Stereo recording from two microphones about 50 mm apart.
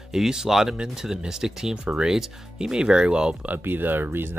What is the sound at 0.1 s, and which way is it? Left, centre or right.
Speech, centre.